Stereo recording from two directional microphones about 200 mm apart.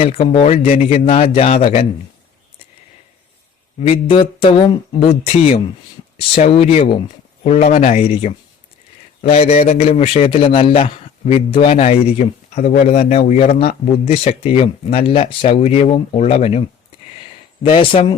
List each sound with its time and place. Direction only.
0.0 s a man's voice: 30° left (ahead or behind)
3.8 s a man's voice: 30° left (ahead or behind)